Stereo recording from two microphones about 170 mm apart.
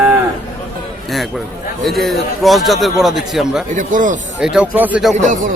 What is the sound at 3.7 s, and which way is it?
Speech, 50° right (ahead or behind).